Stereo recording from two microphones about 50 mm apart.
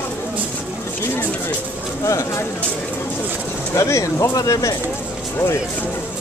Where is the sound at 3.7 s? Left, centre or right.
Left.